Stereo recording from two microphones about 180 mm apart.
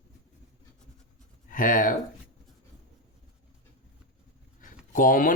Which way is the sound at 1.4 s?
50° left (ahead or behind).